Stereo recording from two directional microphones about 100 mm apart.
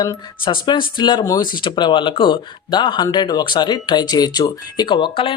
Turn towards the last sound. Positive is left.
turn(degrees=55)  # may be behind; listen again after turning